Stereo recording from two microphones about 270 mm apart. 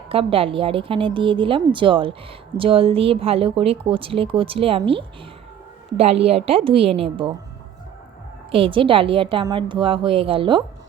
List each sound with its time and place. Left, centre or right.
0.1 s speech: right
8.4 s speech: centre